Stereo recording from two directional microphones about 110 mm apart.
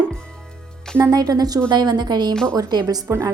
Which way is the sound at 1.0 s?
35° right (ahead or behind).